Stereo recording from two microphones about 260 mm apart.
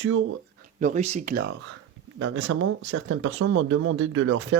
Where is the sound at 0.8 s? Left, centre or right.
Right.